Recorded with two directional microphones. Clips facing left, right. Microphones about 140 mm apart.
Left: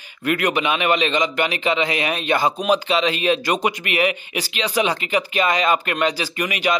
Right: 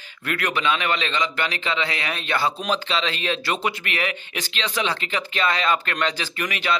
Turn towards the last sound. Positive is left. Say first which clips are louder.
# left 4 dB
turn(degrees=15)  # may be behind; listen again after turning